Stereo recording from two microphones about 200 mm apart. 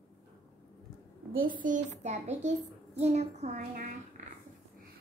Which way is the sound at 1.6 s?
40° right (ahead or behind).